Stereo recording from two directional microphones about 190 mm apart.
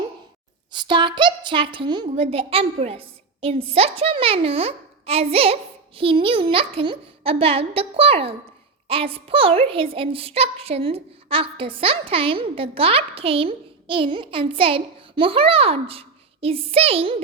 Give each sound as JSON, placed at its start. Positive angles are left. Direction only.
{"t": 0.7, "sound": "a woman's voice", "side_deg": -25}